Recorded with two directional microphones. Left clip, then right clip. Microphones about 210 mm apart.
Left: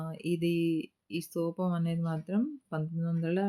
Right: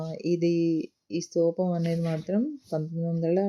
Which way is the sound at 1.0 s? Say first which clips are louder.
Right 13 dB; 20° left (ahead or behind).